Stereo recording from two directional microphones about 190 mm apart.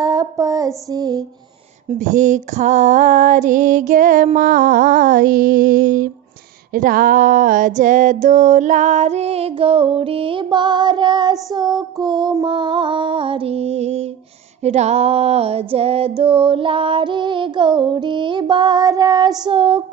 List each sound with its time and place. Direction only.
0.0 s female singing: 20° right (ahead or behind)
1.9 s female singing: 40° right (ahead or behind)